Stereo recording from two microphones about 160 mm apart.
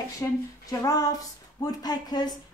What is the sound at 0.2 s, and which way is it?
A woman's voice, 20° left (ahead or behind).